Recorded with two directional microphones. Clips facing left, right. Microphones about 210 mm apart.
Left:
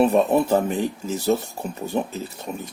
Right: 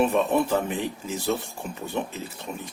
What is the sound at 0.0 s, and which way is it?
Speech, 40° left (ahead or behind).